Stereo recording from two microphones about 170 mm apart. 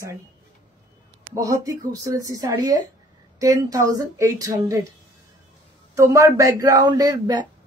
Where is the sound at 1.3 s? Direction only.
20° right (ahead or behind).